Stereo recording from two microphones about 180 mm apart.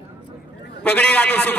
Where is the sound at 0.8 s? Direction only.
10° left (ahead or behind).